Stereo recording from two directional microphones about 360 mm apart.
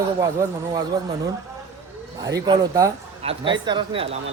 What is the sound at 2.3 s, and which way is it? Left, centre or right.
Speech, centre.